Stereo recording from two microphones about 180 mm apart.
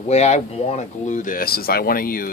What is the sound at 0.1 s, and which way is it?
Speech, 35° left (ahead or behind).